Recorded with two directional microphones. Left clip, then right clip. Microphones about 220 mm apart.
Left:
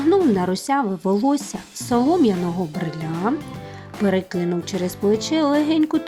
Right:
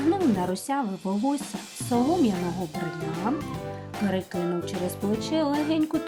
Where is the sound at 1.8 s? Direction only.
30° left (ahead or behind).